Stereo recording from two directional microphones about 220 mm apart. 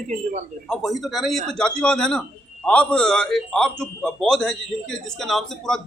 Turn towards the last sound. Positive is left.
turn(degrees=0)  # may be behind; listen again after turning